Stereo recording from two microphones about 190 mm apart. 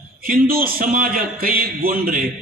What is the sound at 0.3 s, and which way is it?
A man's voice, 50° right (ahead or behind).